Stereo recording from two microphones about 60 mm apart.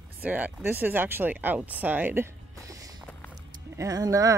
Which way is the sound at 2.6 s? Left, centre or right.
Right.